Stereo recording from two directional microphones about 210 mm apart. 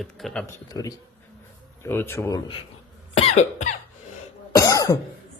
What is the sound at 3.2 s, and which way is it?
Cough, 30° left (ahead or behind).